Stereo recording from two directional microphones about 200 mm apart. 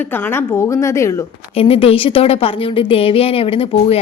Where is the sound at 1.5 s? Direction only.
30° left (ahead or behind).